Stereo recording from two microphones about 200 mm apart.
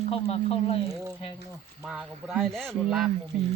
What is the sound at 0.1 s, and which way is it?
Speech, 30° left (ahead or behind).